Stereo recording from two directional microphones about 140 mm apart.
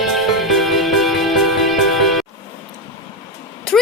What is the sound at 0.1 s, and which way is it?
Music, centre (ahead or behind).